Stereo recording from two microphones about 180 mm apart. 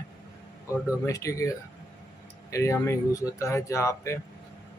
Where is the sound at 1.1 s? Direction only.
15° left (ahead or behind).